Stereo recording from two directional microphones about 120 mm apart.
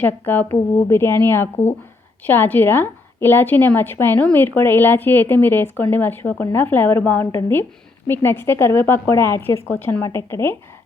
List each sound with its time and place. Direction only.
0.0 s a woman's voice: 15° left (ahead or behind)